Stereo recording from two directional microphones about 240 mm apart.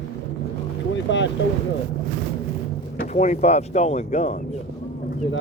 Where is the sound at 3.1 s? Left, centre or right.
Left.